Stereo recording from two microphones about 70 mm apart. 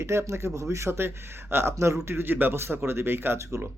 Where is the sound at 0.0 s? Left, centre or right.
Right.